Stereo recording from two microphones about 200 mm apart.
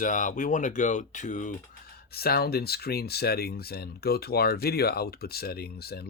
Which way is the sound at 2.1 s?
50° left (ahead or behind).